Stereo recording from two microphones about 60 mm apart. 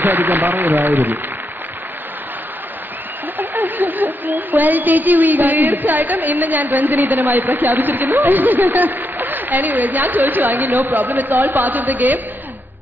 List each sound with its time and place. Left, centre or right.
0.0 s speech: right
3.3 s a woman's voice: right